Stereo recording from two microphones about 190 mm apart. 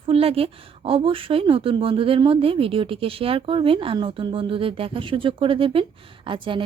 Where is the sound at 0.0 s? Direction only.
30° right (ahead or behind).